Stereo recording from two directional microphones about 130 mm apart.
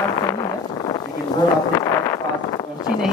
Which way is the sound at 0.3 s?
35° left (ahead or behind).